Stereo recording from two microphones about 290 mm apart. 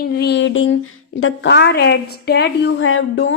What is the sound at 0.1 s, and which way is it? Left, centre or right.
A woman's voice, left.